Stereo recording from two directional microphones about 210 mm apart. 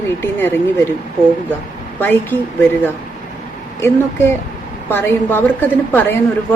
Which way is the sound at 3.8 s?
10° left (ahead or behind).